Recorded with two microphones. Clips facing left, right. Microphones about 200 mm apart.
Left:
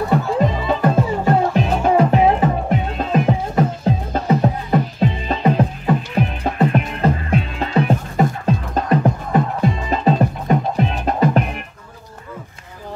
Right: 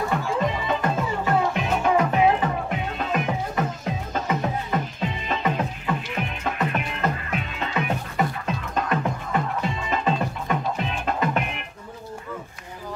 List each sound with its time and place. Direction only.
0.4 s music: 35° left (ahead or behind)